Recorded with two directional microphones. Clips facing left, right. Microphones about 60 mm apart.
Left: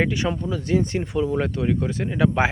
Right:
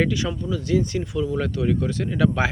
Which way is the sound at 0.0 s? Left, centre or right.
Left.